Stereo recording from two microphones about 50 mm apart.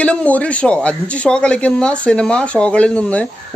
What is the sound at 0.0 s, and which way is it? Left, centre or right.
Speech, left.